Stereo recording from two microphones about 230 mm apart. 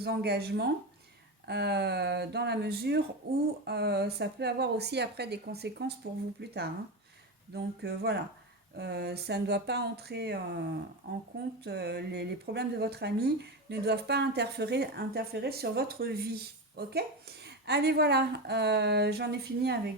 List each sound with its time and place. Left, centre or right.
0.0 s speech: right
11.6 s speech: right